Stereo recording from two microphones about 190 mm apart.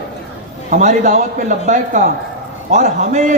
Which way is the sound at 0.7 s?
40° right (ahead or behind).